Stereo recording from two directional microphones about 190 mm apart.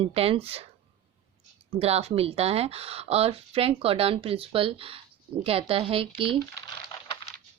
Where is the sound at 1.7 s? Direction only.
35° right (ahead or behind).